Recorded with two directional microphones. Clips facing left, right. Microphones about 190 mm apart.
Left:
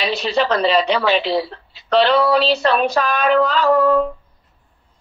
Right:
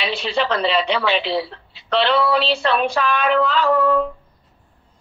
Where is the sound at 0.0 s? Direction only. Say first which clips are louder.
Left 3 dB; 40° left (ahead or behind).